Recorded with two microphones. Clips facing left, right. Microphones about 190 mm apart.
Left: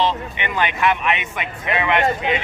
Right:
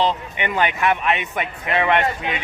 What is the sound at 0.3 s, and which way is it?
Speech, 45° right (ahead or behind).